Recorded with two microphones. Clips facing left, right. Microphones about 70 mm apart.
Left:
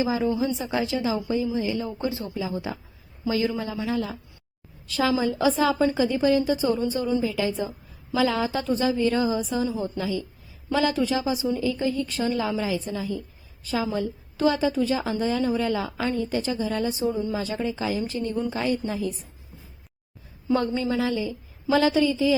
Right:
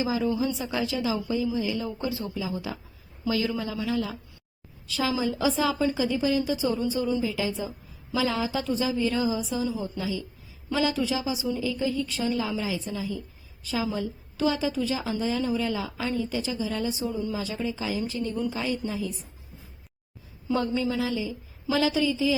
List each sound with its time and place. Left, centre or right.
0.0 s a woman's voice: left
4.9 s a woman's voice: left
20.5 s a woman's voice: left